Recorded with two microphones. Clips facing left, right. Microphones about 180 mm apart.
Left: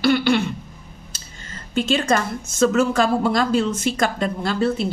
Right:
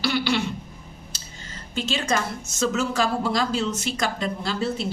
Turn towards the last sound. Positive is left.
turn(degrees=55)  # may be behind; listen again after turning